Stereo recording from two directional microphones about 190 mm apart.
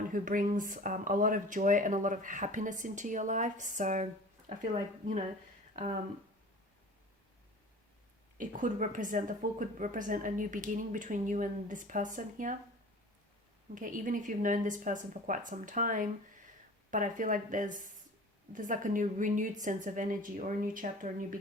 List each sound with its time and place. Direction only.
0.1 s speech: 45° right (ahead or behind)
8.4 s speech: 45° right (ahead or behind)
13.7 s speech: 45° right (ahead or behind)